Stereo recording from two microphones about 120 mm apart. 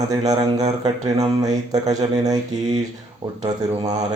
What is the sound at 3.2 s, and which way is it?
Speech, 65° right (ahead or behind).